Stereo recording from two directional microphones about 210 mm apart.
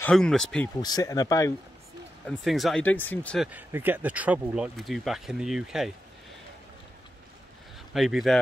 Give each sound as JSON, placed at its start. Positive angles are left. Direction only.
{"t": 0.0, "sound": "speech", "side_deg": 5}
{"t": 0.7, "sound": "speech", "side_deg": 20}
{"t": 2.2, "sound": "speech", "side_deg": 0}
{"t": 3.4, "sound": "speech", "side_deg": -10}
{"t": 7.9, "sound": "speech", "side_deg": 0}